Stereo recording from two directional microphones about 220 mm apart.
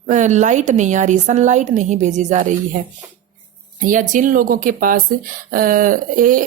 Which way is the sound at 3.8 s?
35° right (ahead or behind).